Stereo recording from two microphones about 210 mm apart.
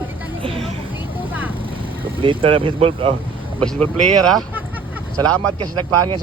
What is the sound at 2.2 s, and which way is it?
Speech, 25° right (ahead or behind).